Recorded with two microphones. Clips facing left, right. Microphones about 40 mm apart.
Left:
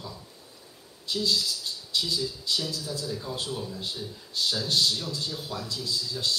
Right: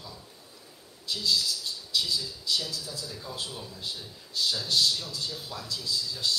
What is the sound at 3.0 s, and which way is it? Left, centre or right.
A man's voice, centre.